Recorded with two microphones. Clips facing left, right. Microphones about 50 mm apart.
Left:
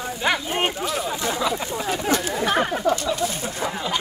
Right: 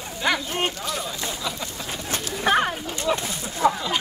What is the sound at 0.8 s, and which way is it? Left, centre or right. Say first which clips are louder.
Speech: left 4 dB; centre.